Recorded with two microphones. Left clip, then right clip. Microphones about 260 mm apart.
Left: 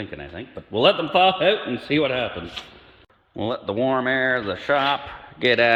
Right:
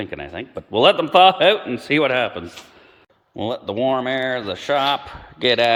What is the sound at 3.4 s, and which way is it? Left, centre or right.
A man's voice, centre.